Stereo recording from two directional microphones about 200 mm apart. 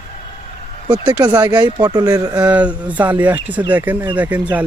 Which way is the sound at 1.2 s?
20° right (ahead or behind).